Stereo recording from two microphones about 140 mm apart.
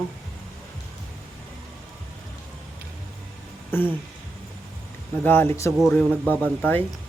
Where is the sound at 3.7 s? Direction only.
15° left (ahead or behind).